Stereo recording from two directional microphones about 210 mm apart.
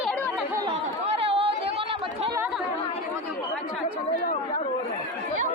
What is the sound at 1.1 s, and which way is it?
Chatter, 25° right (ahead or behind).